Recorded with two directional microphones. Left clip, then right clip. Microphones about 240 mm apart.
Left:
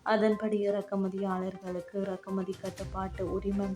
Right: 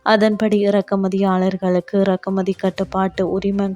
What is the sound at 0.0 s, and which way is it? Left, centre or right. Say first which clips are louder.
Speech: right 12 dB; right.